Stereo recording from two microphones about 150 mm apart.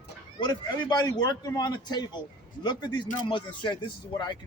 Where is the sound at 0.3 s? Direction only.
30° left (ahead or behind).